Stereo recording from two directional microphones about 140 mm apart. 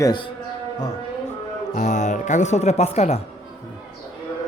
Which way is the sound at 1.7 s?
55° left (ahead or behind).